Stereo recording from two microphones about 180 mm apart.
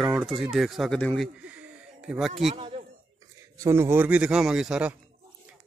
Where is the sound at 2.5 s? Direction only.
30° right (ahead or behind).